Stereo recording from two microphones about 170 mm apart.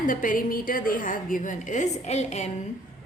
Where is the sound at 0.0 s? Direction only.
50° left (ahead or behind).